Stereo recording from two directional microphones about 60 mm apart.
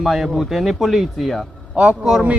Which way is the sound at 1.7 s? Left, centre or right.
Centre.